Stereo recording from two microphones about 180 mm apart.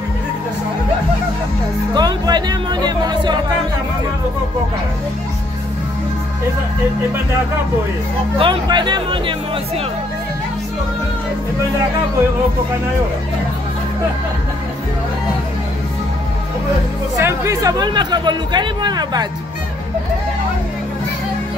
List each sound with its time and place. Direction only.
2.0 s music: 25° right (ahead or behind)
8.4 s speech: 25° right (ahead or behind)
17.2 s speech: 15° right (ahead or behind)